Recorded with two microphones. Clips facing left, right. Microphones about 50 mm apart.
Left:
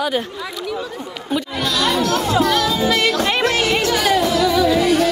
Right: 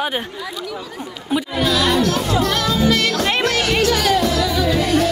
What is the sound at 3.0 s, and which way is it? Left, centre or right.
Music, centre.